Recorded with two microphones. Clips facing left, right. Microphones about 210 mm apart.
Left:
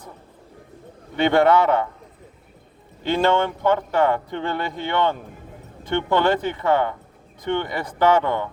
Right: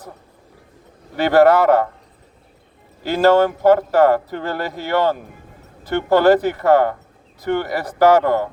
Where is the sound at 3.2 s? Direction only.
40° right (ahead or behind).